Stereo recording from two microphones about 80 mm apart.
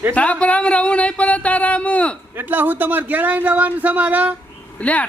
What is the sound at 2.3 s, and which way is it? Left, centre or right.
Speech, right.